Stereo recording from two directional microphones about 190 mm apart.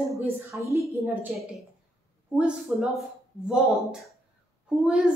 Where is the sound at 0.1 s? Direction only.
15° right (ahead or behind).